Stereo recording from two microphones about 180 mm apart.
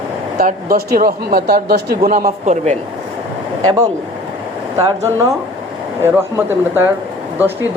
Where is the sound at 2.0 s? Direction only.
50° right (ahead or behind).